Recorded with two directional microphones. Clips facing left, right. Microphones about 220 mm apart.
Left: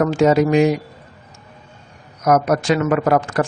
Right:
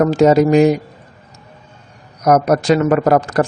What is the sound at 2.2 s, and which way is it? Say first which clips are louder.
Speech: right 3 dB; 35° right (ahead or behind).